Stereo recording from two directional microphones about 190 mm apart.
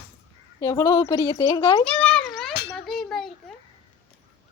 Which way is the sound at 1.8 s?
5° left (ahead or behind).